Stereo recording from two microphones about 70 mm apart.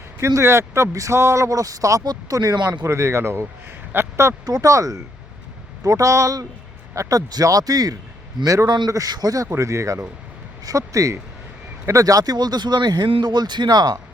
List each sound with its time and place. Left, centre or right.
0.3 s speech: right
1.5 s speech: right
2.3 s speech: right
2.8 s speech: right
4.4 s speech: right
7.2 s speech: right
8.6 s a man's voice: right
8.9 s speech: right
9.5 s speech: right